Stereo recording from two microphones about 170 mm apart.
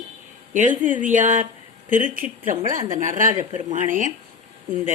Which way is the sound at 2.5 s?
50° right (ahead or behind).